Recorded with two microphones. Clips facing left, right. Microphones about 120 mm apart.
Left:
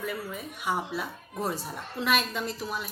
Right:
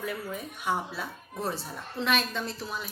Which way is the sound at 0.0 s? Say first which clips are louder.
Even; centre (ahead or behind).